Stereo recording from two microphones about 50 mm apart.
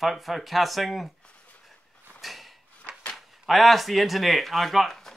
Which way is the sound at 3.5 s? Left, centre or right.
Centre.